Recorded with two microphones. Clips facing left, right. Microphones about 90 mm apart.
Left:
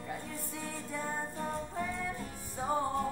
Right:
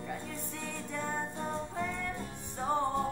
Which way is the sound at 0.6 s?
5° left (ahead or behind).